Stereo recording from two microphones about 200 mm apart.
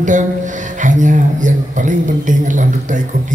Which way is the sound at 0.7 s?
40° right (ahead or behind).